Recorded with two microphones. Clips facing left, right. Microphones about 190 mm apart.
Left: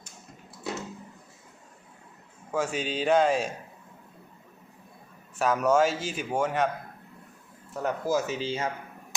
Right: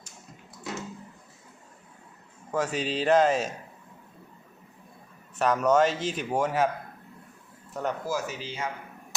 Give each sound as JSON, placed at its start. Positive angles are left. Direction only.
{"t": 2.5, "sound": "speech", "side_deg": 0}
{"t": 5.4, "sound": "speech", "side_deg": 5}
{"t": 7.7, "sound": "speech", "side_deg": 0}
{"t": 8.0, "sound": "speech", "side_deg": 20}